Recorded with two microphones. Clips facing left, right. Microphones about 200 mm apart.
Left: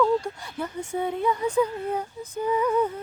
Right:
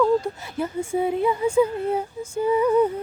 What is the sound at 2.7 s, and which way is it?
Speech, 10° right (ahead or behind).